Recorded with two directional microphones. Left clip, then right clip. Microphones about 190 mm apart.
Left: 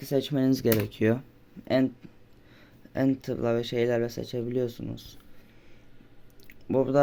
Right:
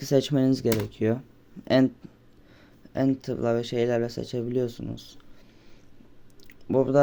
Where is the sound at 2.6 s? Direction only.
5° right (ahead or behind).